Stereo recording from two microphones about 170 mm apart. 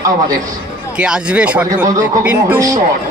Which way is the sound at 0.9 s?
5° right (ahead or behind).